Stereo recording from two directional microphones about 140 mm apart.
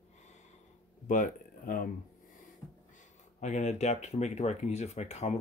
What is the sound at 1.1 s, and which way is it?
Speech, 75° left (ahead or behind).